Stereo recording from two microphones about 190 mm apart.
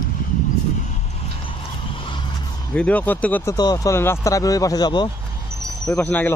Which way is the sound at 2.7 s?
5° left (ahead or behind).